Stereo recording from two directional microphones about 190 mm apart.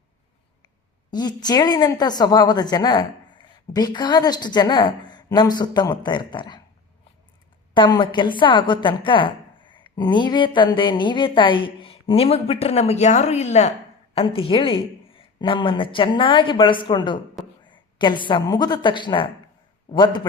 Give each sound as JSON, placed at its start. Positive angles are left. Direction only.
{"t": 1.1, "sound": "a woman's voice", "side_deg": 20}
{"t": 7.7, "sound": "a woman's voice", "side_deg": 20}